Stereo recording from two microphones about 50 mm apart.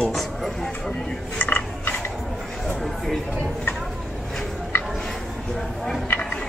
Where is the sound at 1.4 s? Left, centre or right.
Left.